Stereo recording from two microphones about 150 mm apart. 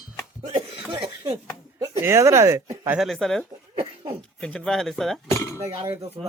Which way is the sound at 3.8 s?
40° right (ahead or behind).